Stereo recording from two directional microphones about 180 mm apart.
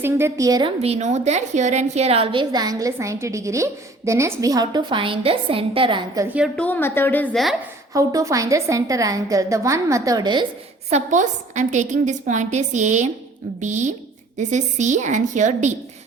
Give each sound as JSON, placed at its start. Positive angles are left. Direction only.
{"t": 0.0, "sound": "a woman's voice", "side_deg": -15}
{"t": 0.8, "sound": "a woman's voice", "side_deg": -35}
{"t": 6.2, "sound": "a woman's voice", "side_deg": -5}
{"t": 6.6, "sound": "a woman's voice", "side_deg": 10}
{"t": 7.9, "sound": "a woman's voice", "side_deg": -20}
{"t": 10.8, "sound": "a woman's voice", "side_deg": -40}